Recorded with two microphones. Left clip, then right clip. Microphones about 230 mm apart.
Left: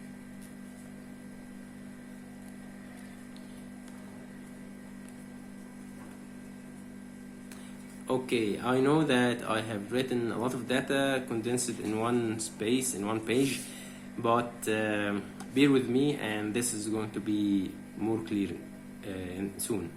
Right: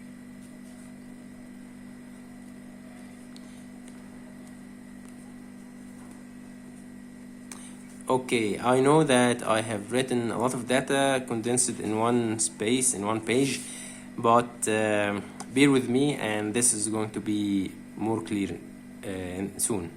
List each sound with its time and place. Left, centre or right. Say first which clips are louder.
8.0 s a man's voice: right 4 dB; right